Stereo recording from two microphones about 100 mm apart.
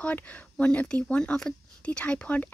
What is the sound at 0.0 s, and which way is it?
Speech, 15° left (ahead or behind).